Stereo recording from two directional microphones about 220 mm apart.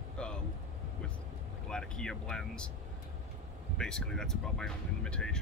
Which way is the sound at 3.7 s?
5° left (ahead or behind).